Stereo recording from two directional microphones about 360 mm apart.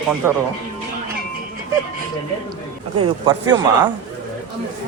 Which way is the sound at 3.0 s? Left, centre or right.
Centre.